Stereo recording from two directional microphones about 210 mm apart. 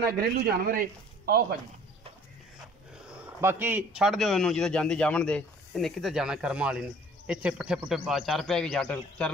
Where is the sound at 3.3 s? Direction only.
10° right (ahead or behind); by 9.3 s 5° left (ahead or behind).